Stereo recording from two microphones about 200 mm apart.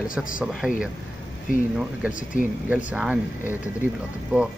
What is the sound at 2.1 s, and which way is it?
Speech, 40° left (ahead or behind).